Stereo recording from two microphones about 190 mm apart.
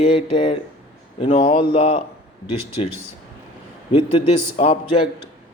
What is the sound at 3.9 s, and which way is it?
Speech, 30° left (ahead or behind).